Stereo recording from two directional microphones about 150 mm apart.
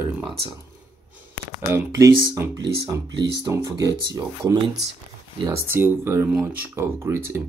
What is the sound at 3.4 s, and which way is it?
Speech, 20° right (ahead or behind).